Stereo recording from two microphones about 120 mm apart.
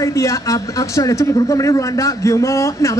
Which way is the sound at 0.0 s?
25° left (ahead or behind).